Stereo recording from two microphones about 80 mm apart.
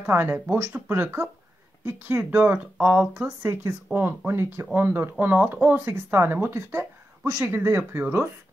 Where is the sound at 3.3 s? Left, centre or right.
Right.